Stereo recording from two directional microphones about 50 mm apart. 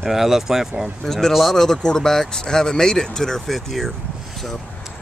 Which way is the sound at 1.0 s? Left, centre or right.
Centre.